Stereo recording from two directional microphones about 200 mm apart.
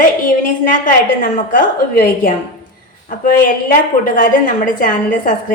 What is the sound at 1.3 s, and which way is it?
A woman's voice, 45° left (ahead or behind).